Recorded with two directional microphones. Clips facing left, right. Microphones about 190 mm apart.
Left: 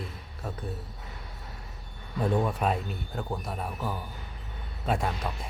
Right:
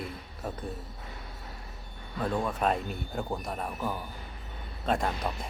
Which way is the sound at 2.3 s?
5° left (ahead or behind).